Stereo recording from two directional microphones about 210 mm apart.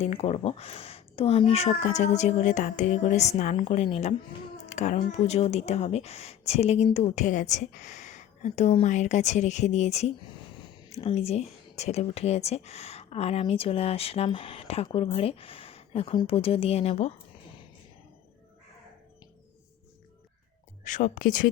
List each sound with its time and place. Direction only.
0.0 s speech: 30° left (ahead or behind)
20.8 s speech: 35° left (ahead or behind)